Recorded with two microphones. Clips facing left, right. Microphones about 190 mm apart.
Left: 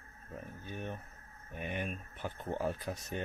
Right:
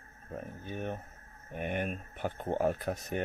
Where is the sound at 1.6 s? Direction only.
50° right (ahead or behind).